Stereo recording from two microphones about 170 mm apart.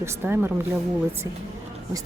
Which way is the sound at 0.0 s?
15° right (ahead or behind).